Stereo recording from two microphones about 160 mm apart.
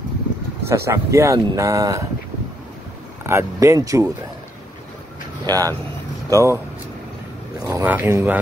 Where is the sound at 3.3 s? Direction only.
15° right (ahead or behind).